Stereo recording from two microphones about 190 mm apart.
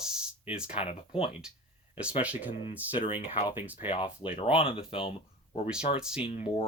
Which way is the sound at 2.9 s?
25° left (ahead or behind).